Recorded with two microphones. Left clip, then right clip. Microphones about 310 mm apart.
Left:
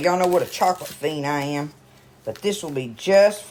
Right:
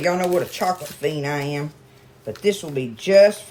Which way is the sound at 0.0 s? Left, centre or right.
Centre.